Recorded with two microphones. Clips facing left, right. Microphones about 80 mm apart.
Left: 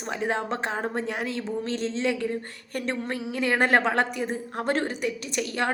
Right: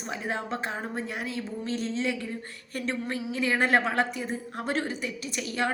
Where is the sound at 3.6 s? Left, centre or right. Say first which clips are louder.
Left 3 dB; left.